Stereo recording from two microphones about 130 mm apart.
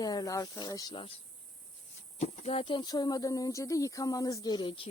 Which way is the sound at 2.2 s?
50° left (ahead or behind).